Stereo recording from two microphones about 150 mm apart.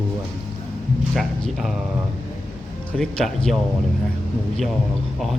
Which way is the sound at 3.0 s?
5° left (ahead or behind).